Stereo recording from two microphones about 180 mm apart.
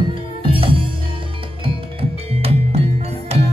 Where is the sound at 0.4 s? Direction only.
30° right (ahead or behind).